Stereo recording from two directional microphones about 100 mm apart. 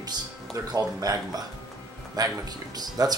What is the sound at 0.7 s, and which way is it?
Speech, 35° right (ahead or behind).